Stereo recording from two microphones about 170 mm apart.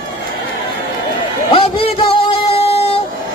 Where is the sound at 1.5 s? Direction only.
35° left (ahead or behind).